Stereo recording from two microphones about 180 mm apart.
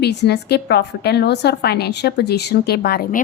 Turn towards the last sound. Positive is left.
turn(degrees=60)  # may be behind; listen again after turning